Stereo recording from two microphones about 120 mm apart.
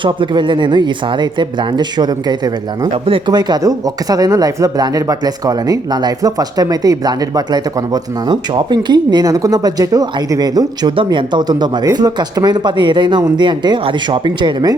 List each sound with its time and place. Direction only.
0.0 s speech: 45° right (ahead or behind)
2.9 s speech: 50° right (ahead or behind)
3.3 s speech: 30° right (ahead or behind)
10.9 s speech: 45° right (ahead or behind)